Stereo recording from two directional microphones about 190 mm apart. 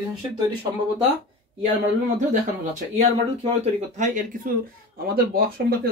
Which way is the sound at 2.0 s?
40° right (ahead or behind).